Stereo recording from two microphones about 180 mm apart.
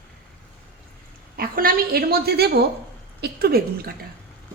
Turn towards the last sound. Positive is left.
turn(degrees=-60)  # may be behind; listen again after turning